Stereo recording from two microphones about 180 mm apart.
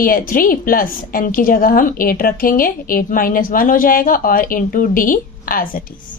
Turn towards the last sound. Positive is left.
turn(degrees=50)  # may be behind; listen again after turning